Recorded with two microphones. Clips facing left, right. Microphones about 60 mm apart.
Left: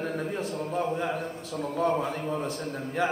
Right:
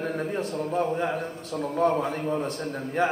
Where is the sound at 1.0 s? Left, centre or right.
Right.